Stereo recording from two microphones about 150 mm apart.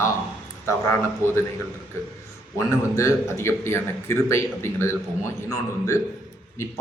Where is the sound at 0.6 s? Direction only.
20° left (ahead or behind).